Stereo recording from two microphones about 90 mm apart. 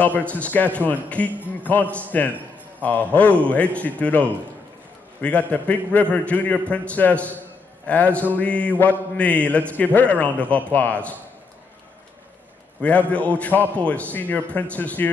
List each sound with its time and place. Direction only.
0.0 s a man's voice: 15° left (ahead or behind)
5.2 s a man's voice: 15° left (ahead or behind)
12.8 s a man's voice: 15° left (ahead or behind)